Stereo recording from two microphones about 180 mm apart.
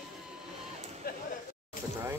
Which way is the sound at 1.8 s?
50° left (ahead or behind).